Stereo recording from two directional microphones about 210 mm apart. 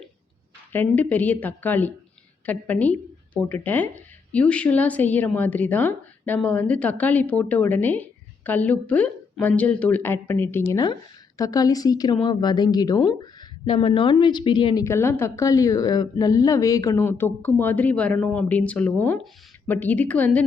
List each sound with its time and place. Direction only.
0.7 s a woman's voice: 10° left (ahead or behind)